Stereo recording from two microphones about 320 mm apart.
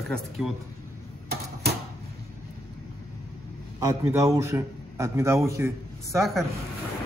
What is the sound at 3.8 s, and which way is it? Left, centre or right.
Speech, centre.